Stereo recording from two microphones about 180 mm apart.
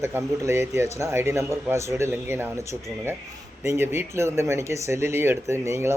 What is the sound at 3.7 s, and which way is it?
Speech, 15° right (ahead or behind).